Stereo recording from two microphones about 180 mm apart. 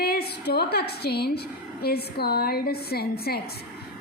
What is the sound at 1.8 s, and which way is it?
Speech, 60° left (ahead or behind).